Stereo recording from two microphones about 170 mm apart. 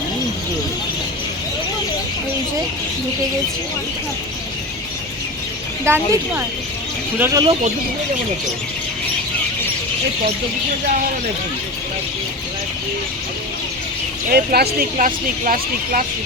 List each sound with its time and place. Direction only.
5.8 s speech: 15° right (ahead or behind)
14.3 s speech: 70° right (ahead or behind)
14.9 s speech: 50° right (ahead or behind)